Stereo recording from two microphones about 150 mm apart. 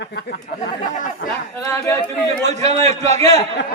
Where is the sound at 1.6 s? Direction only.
20° left (ahead or behind).